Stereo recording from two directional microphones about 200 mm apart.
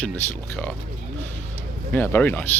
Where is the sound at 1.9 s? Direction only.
10° left (ahead or behind).